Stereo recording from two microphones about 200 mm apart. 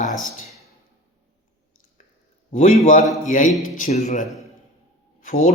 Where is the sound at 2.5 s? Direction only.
35° left (ahead or behind).